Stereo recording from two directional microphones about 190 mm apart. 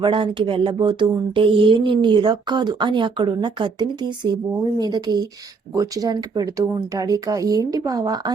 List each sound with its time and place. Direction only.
0.0 s speech: 25° right (ahead or behind)